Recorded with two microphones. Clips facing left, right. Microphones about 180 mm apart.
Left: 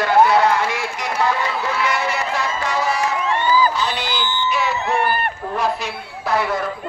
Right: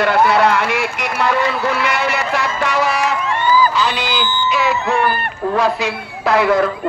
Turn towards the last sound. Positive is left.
turn(degrees=-90)